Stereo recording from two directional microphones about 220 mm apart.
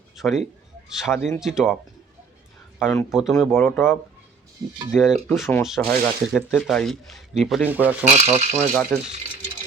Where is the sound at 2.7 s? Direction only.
Centre (ahead or behind).